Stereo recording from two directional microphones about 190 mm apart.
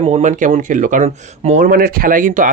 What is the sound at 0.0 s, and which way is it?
Speech, 40° right (ahead or behind).